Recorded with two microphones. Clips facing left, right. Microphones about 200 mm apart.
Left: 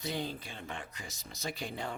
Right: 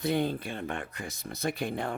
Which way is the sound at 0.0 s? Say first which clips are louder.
Right 9 dB; 55° right (ahead or behind).